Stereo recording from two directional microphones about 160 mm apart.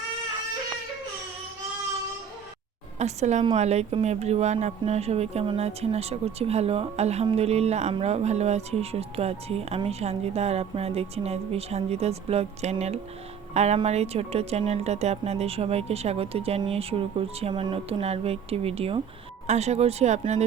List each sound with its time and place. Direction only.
3.0 s speech: 45° right (ahead or behind)